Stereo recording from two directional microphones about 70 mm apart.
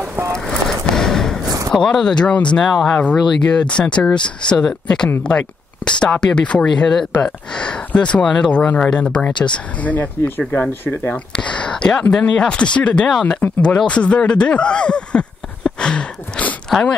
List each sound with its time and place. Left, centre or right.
0.5 s a sound: centre
1.7 s speech: centre
2.7 s speech: centre
3.0 s speech: centre
11.3 s speech: centre